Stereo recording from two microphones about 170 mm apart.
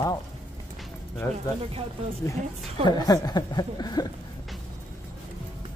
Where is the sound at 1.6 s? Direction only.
35° right (ahead or behind).